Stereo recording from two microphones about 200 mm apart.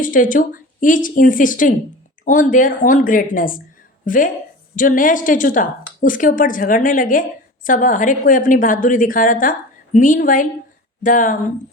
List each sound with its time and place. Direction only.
0.0 s a woman's voice: 40° left (ahead or behind)